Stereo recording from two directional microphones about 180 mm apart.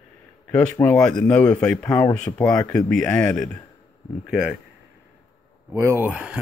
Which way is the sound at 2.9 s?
5° left (ahead or behind).